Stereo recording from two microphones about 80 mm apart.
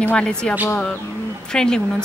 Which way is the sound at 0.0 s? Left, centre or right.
Centre.